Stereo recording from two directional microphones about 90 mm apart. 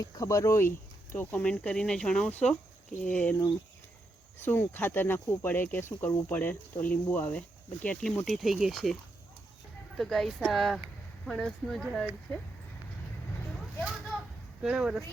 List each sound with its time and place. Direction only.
0.0 s speech: 40° left (ahead or behind)
1.4 s speech: 10° left (ahead or behind)
4.4 s speech: 25° left (ahead or behind)
8.2 s speech: centre (ahead or behind)
10.0 s speech: 5° left (ahead or behind)
13.7 s speech: centre (ahead or behind)